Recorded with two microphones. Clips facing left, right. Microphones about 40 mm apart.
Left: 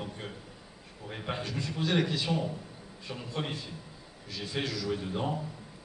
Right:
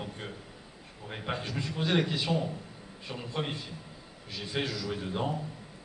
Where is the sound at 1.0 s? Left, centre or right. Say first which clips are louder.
Even; centre.